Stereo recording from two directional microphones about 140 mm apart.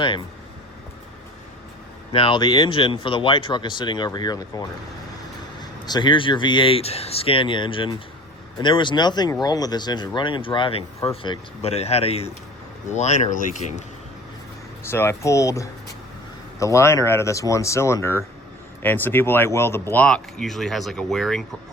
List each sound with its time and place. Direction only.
2.1 s speech: 35° left (ahead or behind)
5.8 s speech: 30° left (ahead or behind); by 13.7 s 65° left (ahead or behind)
14.8 s speech: 15° left (ahead or behind); by 21.4 s centre (ahead or behind)